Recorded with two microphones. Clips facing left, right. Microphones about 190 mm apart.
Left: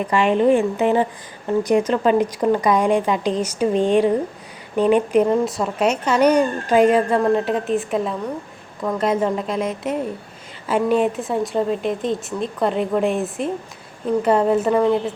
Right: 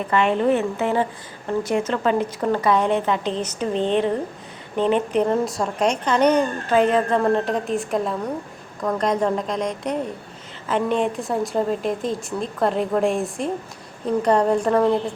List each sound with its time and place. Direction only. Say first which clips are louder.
0.1 s speech: left 3 dB; 15° left (ahead or behind)